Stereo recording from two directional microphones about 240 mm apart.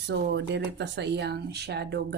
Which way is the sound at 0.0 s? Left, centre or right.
Right.